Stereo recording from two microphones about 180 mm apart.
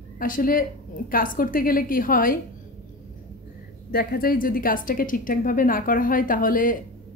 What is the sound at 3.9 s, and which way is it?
Speech, 55° left (ahead or behind).